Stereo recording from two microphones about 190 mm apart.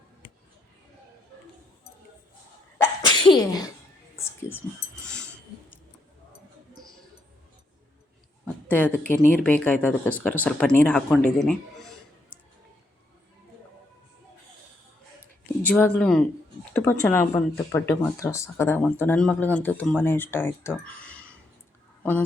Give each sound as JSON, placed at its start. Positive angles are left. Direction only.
{"t": 3.0, "sound": "sneeze", "side_deg": 25}
{"t": 4.2, "sound": "whispering", "side_deg": 10}
{"t": 5.0, "sound": "a sound", "side_deg": 5}
{"t": 8.6, "sound": "speech", "side_deg": 10}
{"t": 15.6, "sound": "speech", "side_deg": 5}